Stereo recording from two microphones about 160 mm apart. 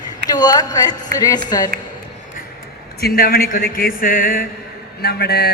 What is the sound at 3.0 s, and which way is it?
Speech, 70° left (ahead or behind).